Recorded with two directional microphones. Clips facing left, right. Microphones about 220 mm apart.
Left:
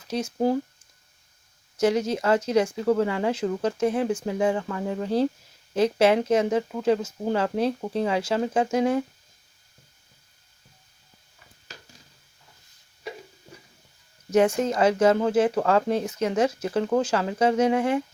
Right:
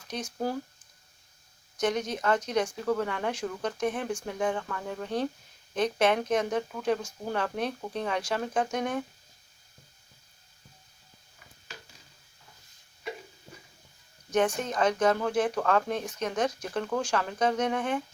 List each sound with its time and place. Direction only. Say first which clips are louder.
1.8 s speech: left 6 dB; 25° left (ahead or behind)
14.3 s speech: left 6 dB; 25° left (ahead or behind)